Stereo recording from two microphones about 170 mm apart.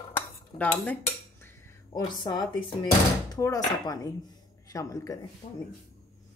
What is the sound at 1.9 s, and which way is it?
Speech, 25° left (ahead or behind).